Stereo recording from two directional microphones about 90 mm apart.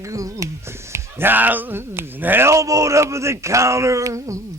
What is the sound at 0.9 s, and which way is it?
Speech, 25° right (ahead or behind).